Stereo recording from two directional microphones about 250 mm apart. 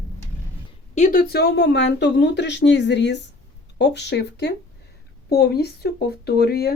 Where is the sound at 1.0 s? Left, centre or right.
Left.